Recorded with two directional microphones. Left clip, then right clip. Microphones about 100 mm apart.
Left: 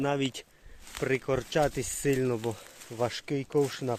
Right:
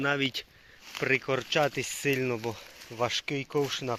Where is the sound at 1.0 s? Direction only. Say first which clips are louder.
Right 2 dB; 30° left (ahead or behind).